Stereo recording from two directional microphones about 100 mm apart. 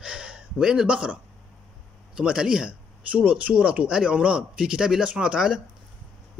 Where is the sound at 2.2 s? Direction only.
10° right (ahead or behind).